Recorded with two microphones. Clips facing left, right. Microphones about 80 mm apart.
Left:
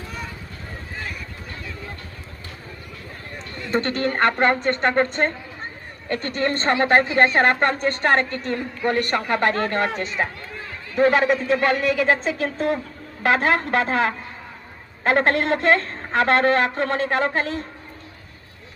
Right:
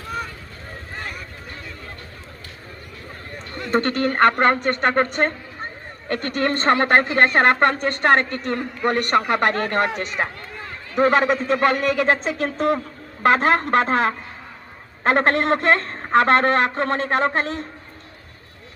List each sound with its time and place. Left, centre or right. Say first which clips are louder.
3.6 s speech: right 2 dB; right
6.6 s speech: right 1 dB; right
9.0 s speech: right 4 dB; right
10.9 s speech: even; right